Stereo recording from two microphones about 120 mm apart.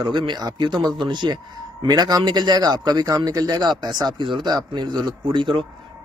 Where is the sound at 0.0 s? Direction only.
40° right (ahead or behind).